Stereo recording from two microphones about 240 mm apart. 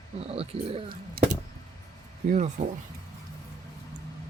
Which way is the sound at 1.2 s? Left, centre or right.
Right.